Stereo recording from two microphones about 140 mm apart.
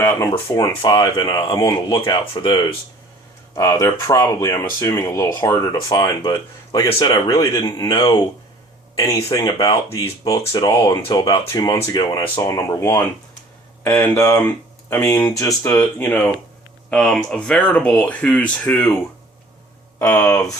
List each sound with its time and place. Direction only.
0.0 s speech: 20° left (ahead or behind)
0.8 s speech: 35° left (ahead or behind)
9.0 s speech: 25° left (ahead or behind)
16.9 s speech: 5° left (ahead or behind)
20.0 s speech: 15° left (ahead or behind)